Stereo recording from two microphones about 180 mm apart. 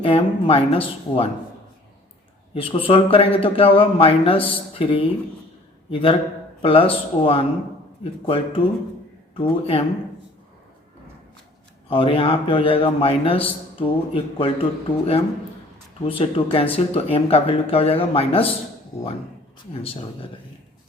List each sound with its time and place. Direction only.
0.0 s a man's voice: 30° left (ahead or behind)
2.6 s a man's voice: 30° left (ahead or behind)
11.9 s a man's voice: 30° left (ahead or behind)